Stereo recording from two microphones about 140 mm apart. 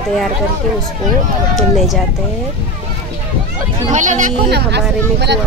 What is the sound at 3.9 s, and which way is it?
Speech, 65° right (ahead or behind).